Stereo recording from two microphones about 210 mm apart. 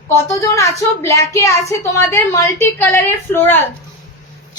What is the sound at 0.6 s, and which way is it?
A woman's voice, 15° left (ahead or behind).